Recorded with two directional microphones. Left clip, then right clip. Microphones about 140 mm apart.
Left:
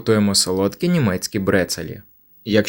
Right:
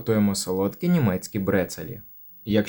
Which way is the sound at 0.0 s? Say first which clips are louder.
Left 7 dB; 25° left (ahead or behind).